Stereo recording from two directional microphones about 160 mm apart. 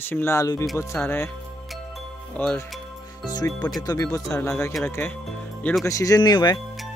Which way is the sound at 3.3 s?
25° left (ahead or behind).